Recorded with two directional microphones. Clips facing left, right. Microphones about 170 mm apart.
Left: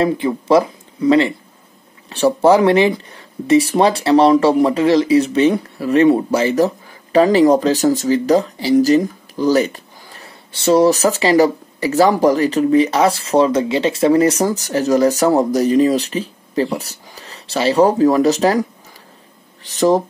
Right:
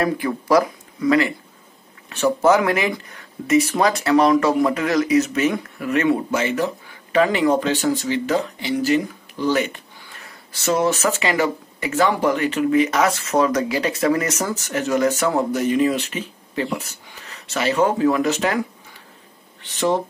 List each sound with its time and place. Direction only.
0.0 s speech: 25° left (ahead or behind)